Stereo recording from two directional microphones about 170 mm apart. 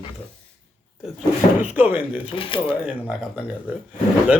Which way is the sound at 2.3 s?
30° left (ahead or behind).